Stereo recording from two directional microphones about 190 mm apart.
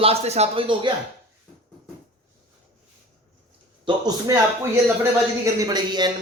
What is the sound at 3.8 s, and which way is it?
Speech, 20° right (ahead or behind).